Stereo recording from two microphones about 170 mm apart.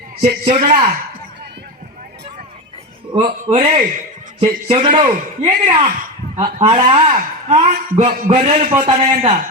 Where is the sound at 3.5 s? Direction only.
35° right (ahead or behind).